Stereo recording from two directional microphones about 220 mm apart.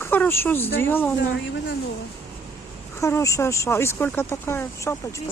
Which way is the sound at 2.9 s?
15° left (ahead or behind).